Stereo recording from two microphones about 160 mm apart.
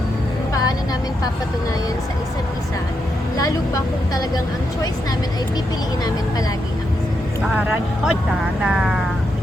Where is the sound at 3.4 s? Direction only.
20° left (ahead or behind).